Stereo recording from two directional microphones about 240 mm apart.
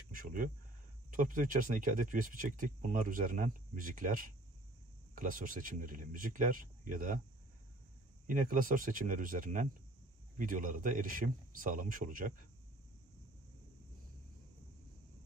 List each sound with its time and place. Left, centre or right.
0.1 s speech: right
8.3 s speech: right